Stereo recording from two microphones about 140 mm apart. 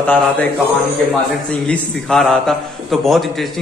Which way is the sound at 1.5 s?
5° left (ahead or behind).